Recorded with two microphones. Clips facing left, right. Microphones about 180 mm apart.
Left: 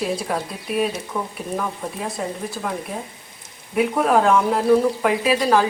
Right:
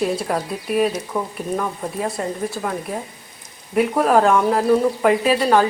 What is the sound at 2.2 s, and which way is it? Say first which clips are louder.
Speech: even; centre (ahead or behind).